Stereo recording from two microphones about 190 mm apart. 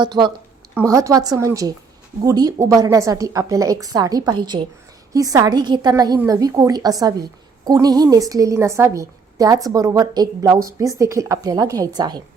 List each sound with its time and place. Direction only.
0.0 s a woman's voice: 25° right (ahead or behind)